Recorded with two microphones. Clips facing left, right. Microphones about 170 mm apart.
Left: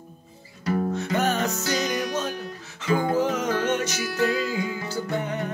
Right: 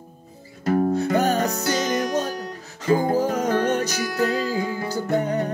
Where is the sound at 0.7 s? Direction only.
40° right (ahead or behind).